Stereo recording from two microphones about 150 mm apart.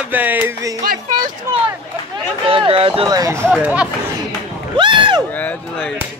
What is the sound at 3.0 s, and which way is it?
Speech, 25° right (ahead or behind).